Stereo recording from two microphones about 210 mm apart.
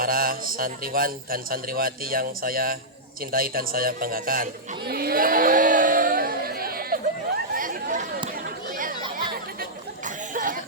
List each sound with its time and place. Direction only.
0.0 s a man's voice: 45° right (ahead or behind)
4.9 s crowd: 45° right (ahead or behind)
7.5 s chatter: 40° right (ahead or behind)
8.4 s a sound: 40° right (ahead or behind)
10.3 s cough: 40° right (ahead or behind)